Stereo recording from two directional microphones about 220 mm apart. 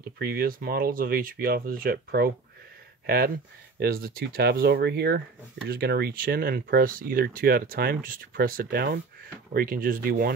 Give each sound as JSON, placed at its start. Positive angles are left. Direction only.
{"t": 0.2, "sound": "speech", "side_deg": -45}
{"t": 3.8, "sound": "speech", "side_deg": -40}